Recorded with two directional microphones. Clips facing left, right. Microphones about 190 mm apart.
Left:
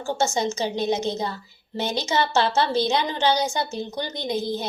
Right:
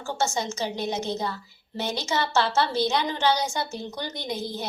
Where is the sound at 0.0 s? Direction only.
20° left (ahead or behind).